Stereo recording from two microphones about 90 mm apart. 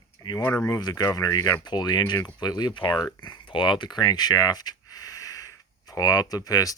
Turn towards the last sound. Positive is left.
turn(degrees=45)  # may be behind; listen again after turning